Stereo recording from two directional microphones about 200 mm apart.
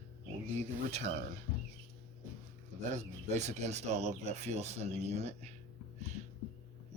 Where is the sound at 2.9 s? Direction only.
35° right (ahead or behind).